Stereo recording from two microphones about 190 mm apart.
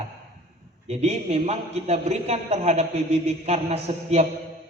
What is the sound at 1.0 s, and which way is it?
A man's voice, 35° right (ahead or behind).